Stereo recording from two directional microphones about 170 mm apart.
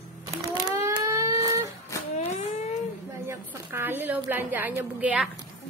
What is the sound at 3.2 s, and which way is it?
A woman's voice, 10° right (ahead or behind).